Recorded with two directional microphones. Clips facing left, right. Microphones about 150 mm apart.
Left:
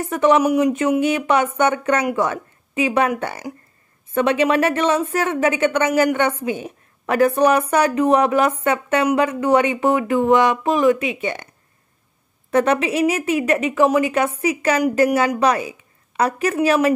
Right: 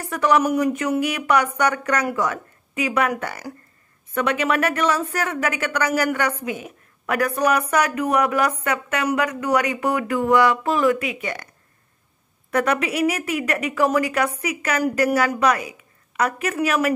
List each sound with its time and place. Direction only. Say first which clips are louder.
0.0 s a woman's voice: left 4 dB; 20° left (ahead or behind)
0.7 s a woman's voice: left 5 dB; 25° left (ahead or behind)
12.4 s a woman's voice: left 4 dB; 25° left (ahead or behind)